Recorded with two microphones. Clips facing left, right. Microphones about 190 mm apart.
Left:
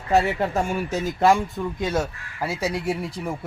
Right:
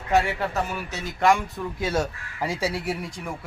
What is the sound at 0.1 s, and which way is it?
Speech, 35° left (ahead or behind).